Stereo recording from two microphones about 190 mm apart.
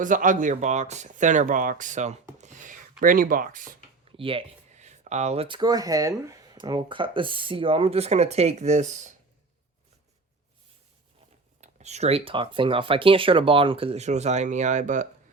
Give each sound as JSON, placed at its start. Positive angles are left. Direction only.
{"t": 0.0, "sound": "speech", "side_deg": -45}
{"t": 2.4, "sound": "a sound", "side_deg": -40}
{"t": 4.2, "sound": "speech", "side_deg": -30}
{"t": 11.6, "sound": "speech", "side_deg": -35}